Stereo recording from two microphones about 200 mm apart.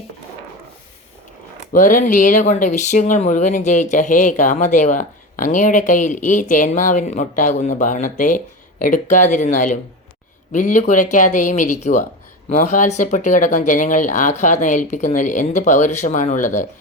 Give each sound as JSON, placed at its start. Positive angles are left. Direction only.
{"t": 1.7, "sound": "speech", "side_deg": 40}